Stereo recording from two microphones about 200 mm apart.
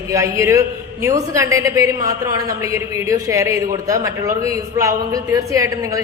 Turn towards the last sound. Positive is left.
turn(degrees=-15)  # may be behind; listen again after turning